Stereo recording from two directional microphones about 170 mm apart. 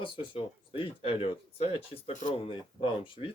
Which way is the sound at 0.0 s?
30° left (ahead or behind).